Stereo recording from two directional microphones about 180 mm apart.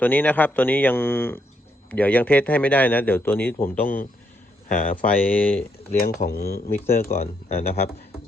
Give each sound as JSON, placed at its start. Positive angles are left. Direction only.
{"t": 0.0, "sound": "a man's voice", "side_deg": 10}
{"t": 4.7, "sound": "speech", "side_deg": 50}
{"t": 5.1, "sound": "a man's voice", "side_deg": 10}
{"t": 6.2, "sound": "speech", "side_deg": 60}
{"t": 7.1, "sound": "speech", "side_deg": 35}